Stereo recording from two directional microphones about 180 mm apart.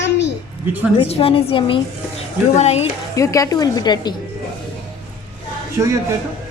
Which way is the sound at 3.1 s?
20° left (ahead or behind).